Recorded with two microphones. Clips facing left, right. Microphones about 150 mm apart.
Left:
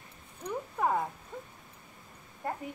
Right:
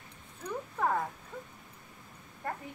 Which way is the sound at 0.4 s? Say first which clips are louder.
Left 1 dB; 15° left (ahead or behind).